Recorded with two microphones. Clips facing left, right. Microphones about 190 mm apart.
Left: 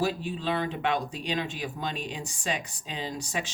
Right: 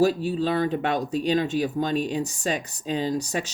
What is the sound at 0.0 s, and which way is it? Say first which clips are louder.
Speech: right 8 dB; 40° right (ahead or behind).